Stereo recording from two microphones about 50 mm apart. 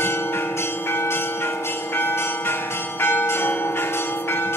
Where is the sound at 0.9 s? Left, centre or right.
Left.